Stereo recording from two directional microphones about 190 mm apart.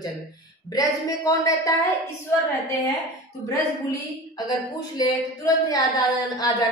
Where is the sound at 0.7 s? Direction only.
20° left (ahead or behind).